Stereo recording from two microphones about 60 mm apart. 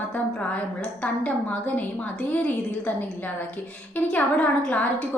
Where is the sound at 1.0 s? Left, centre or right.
Left.